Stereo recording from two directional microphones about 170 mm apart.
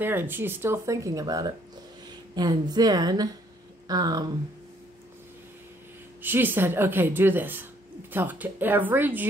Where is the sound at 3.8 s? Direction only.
20° right (ahead or behind).